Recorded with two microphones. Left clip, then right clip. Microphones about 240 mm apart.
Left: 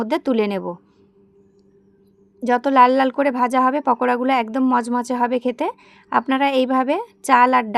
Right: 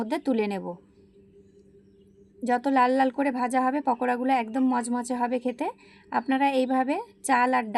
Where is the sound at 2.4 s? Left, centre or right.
Left.